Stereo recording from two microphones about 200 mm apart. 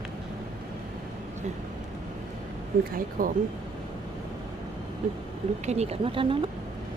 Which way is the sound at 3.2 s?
45° right (ahead or behind).